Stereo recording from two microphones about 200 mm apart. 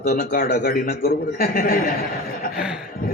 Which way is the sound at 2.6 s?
5° right (ahead or behind).